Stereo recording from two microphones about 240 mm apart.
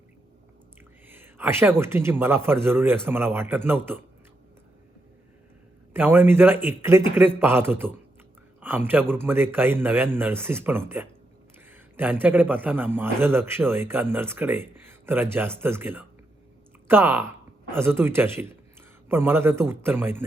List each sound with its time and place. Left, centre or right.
1.0 s whispering: centre
1.8 s speech: centre
5.9 s a man's voice: centre